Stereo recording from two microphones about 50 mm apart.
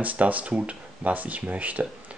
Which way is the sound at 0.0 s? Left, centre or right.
Right.